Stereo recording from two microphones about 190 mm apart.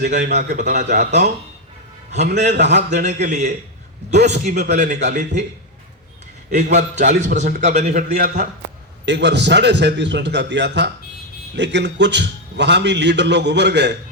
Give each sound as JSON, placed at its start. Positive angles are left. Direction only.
{"t": 0.0, "sound": "a man's voice", "side_deg": -40}
{"t": 2.6, "sound": "a man's voice", "side_deg": -60}
{"t": 3.2, "sound": "a man's voice", "side_deg": -40}
{"t": 6.5, "sound": "a man's voice", "side_deg": -40}
{"t": 9.0, "sound": "a man's voice", "side_deg": -65}